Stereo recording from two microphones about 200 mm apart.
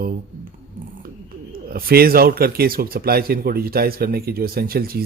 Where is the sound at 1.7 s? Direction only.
50° right (ahead or behind).